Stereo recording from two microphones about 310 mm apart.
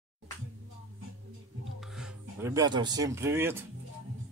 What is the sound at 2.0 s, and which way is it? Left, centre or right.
Speech, centre.